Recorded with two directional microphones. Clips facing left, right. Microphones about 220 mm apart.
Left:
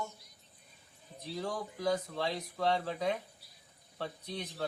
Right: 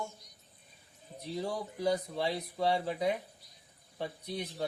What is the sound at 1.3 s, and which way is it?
Speech, 15° right (ahead or behind).